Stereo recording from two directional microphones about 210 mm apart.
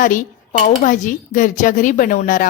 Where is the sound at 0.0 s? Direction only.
40° left (ahead or behind).